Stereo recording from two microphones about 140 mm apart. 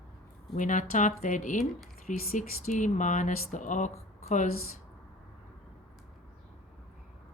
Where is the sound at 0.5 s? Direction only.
65° left (ahead or behind).